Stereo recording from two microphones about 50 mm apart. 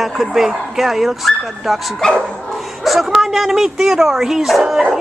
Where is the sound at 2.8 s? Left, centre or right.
Centre.